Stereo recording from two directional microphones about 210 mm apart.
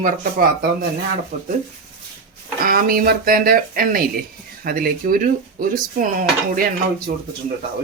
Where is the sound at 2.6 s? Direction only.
45° right (ahead or behind).